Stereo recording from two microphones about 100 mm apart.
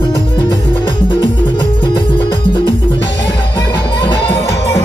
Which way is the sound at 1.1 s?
50° left (ahead or behind).